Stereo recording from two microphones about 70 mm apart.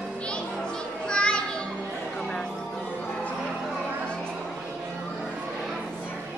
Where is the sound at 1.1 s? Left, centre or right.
Centre.